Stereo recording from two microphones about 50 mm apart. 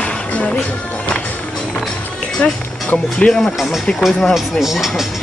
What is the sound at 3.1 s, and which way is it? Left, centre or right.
Speech, centre.